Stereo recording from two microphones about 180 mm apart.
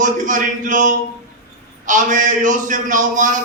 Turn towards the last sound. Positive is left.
turn(degrees=-45)  # may be behind; listen again after turning